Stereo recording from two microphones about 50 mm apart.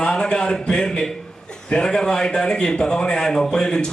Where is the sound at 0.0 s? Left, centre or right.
Centre.